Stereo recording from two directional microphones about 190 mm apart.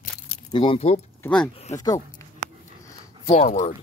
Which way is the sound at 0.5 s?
25° left (ahead or behind).